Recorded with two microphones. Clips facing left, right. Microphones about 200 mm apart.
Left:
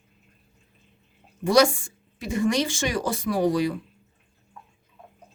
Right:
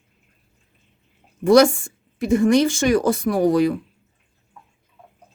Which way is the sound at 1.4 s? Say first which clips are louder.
Right 6 dB; 55° right (ahead or behind).